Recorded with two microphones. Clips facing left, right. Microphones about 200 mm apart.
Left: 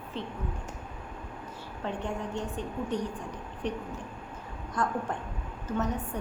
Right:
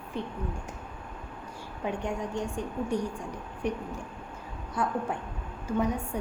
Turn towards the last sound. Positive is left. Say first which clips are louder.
# right 2 dB
turn(degrees=-10)  # may be behind; listen again after turning